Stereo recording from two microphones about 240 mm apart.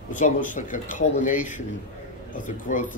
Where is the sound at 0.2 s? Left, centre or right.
Left.